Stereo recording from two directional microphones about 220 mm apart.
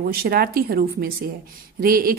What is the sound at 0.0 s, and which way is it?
Speech, 40° right (ahead or behind).